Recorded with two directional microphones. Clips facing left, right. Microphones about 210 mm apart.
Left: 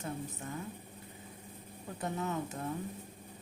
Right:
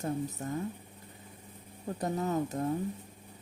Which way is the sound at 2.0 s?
40° right (ahead or behind).